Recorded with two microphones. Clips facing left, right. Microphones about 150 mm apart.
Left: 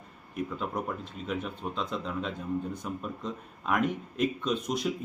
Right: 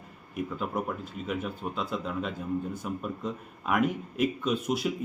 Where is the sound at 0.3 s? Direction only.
5° right (ahead or behind).